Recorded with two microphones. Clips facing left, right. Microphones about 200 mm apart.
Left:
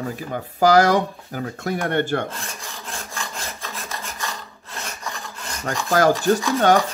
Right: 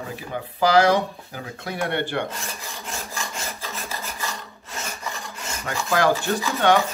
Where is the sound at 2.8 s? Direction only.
5° right (ahead or behind).